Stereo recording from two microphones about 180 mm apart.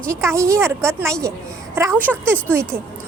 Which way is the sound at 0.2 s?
15° right (ahead or behind).